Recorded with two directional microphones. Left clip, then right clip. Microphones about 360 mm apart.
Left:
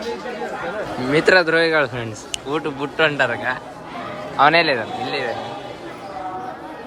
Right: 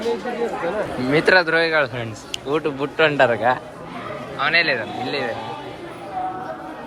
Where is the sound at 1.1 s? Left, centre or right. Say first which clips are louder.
Left 1 dB; centre.